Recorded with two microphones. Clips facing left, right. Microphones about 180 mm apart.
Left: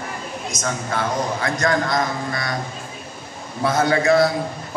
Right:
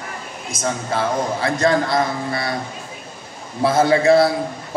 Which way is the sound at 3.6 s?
30° right (ahead or behind).